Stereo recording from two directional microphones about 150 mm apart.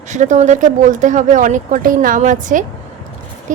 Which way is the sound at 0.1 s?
55° right (ahead or behind).